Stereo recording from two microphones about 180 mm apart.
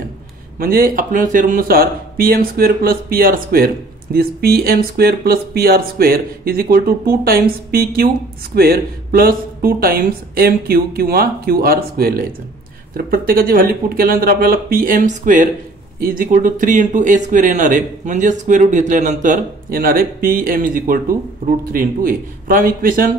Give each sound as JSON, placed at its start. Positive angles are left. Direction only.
{"t": 0.6, "sound": "speech", "side_deg": -55}